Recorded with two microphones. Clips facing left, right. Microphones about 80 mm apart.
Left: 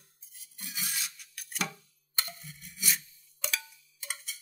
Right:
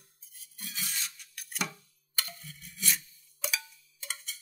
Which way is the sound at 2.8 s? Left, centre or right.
Centre.